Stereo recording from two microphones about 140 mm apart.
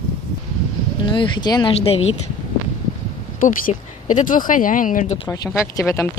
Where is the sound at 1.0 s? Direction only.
35° left (ahead or behind).